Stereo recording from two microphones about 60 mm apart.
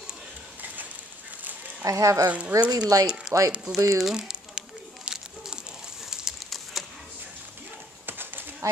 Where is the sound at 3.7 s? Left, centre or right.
Right.